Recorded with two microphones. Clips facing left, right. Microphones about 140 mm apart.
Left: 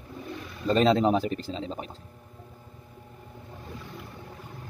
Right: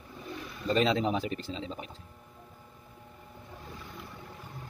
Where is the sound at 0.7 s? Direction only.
40° left (ahead or behind).